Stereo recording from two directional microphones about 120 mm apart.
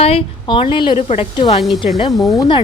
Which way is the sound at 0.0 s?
50° left (ahead or behind).